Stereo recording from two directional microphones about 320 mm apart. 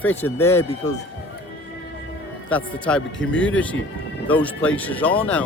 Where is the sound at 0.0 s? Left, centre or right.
Centre.